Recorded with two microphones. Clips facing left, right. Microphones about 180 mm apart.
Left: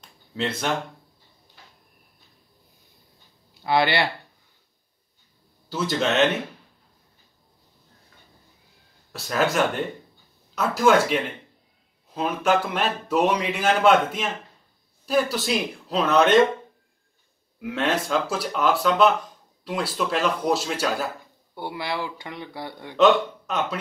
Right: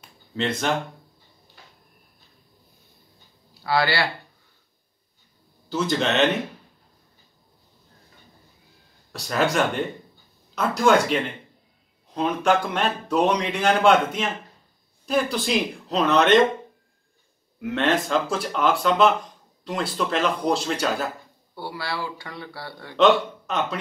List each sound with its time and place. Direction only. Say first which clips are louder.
3.6 s speech: left 1 dB; 20° left (ahead or behind)
5.7 s speech: right 1 dB; centre (ahead or behind)
9.1 s speech: even; centre (ahead or behind)
17.6 s speech: right 2 dB; centre (ahead or behind)
21.5 s speech: left 2 dB; 20° left (ahead or behind)
22.9 s speech: even; centre (ahead or behind)